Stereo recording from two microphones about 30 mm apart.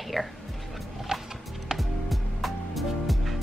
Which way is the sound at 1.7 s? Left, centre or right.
Centre.